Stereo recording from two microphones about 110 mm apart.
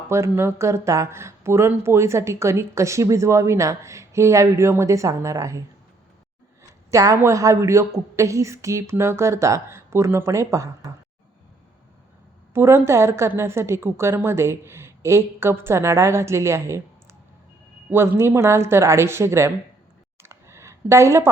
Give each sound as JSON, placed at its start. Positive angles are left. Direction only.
{"t": 0.1, "sound": "speech", "side_deg": -25}
{"t": 12.5, "sound": "speech", "side_deg": -25}
{"t": 20.2, "sound": "a sound", "side_deg": -25}